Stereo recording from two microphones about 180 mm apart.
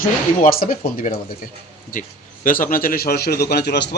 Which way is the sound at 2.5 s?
50° left (ahead or behind).